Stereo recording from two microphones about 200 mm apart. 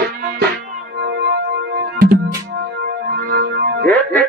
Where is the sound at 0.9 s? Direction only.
55° right (ahead or behind).